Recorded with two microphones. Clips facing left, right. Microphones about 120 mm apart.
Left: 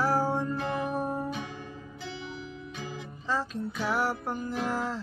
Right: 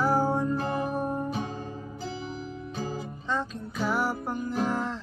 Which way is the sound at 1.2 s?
35° right (ahead or behind).